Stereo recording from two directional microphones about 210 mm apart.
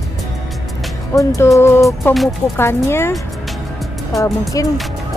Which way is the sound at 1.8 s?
Centre (ahead or behind).